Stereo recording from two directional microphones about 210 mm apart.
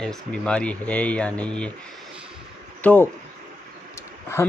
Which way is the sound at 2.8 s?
10° left (ahead or behind).